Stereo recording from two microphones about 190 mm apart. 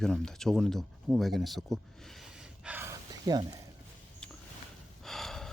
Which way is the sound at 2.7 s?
10° right (ahead or behind).